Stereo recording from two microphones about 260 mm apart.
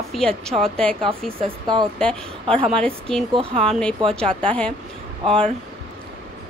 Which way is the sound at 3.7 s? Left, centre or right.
Centre.